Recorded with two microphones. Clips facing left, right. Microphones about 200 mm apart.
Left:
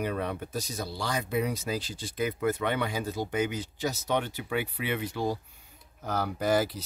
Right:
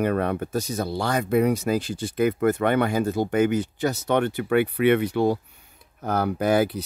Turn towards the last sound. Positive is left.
turn(degrees=-60)  # may be behind; listen again after turning